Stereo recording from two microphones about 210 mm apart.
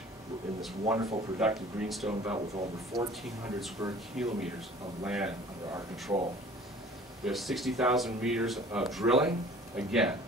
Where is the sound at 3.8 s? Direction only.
15° right (ahead or behind).